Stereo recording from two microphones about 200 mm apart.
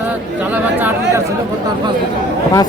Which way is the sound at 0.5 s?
10° right (ahead or behind).